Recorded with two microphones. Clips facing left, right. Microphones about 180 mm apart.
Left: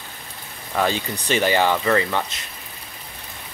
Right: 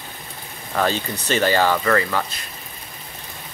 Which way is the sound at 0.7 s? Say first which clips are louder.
Even; 15° left (ahead or behind).